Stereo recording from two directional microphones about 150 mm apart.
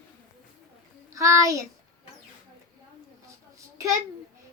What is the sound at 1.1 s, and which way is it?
Speech, 20° right (ahead or behind).